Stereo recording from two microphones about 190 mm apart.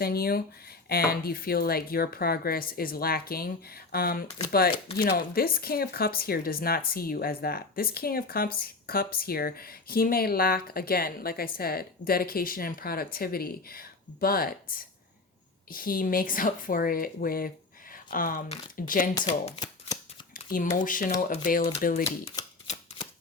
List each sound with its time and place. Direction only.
0.0 s speech: 55° left (ahead or behind)
4.3 s speech: 20° left (ahead or behind)
5.0 s speech: 50° left (ahead or behind)
19.1 s speech: 25° left (ahead or behind)
20.3 s speech: 45° left (ahead or behind)
22.4 s typewriter: 20° left (ahead or behind)